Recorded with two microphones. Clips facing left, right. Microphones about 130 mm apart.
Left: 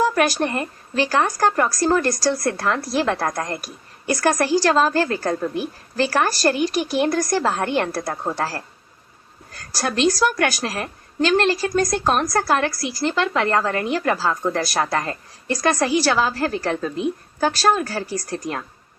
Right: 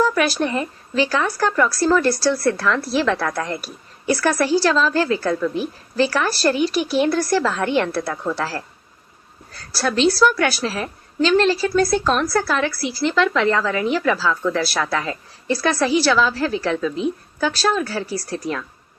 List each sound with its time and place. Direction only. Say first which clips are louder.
0.1 s a woman's voice: even; 40° left (ahead or behind)